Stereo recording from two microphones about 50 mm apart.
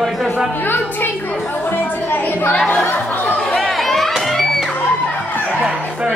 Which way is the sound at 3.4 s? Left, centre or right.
Centre.